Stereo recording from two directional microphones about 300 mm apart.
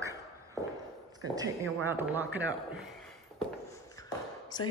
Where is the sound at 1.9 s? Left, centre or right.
Centre.